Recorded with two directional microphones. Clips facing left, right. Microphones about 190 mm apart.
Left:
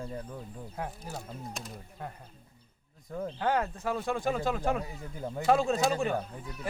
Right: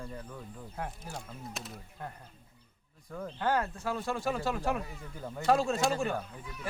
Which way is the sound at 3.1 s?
25° left (ahead or behind).